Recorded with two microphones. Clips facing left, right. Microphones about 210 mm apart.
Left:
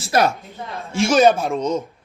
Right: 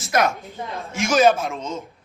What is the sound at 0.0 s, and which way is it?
A man's voice, 30° left (ahead or behind).